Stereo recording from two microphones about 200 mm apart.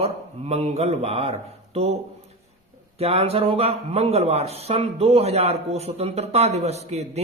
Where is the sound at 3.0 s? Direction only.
30° right (ahead or behind).